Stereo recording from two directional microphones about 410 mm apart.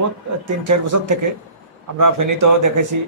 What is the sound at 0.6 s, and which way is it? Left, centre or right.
Speech, right.